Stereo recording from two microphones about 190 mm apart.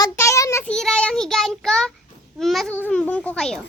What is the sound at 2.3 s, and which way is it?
Babbling, centre (ahead or behind).